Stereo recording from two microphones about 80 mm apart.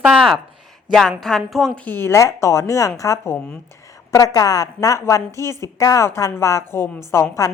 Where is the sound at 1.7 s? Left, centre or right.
Left.